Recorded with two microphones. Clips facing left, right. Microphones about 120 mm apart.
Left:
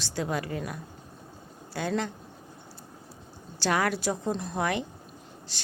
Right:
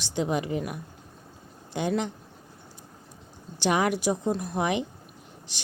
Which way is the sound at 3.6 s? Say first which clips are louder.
Right 2 dB; 15° right (ahead or behind).